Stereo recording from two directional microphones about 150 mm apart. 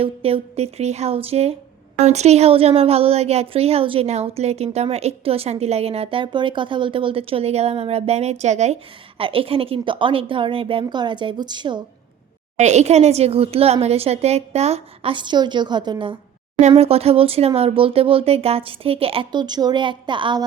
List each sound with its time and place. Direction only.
0.0 s speech: 40° right (ahead or behind)
12.5 s speech: 50° right (ahead or behind); by 16.1 s 30° right (ahead or behind)
16.6 s speech: 45° right (ahead or behind)